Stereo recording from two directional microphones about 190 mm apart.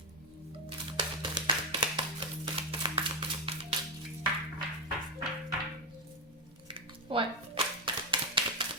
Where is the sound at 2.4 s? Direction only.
30° right (ahead or behind).